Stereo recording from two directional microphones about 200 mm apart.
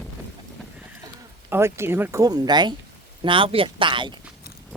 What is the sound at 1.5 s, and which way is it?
Speech, 15° right (ahead or behind).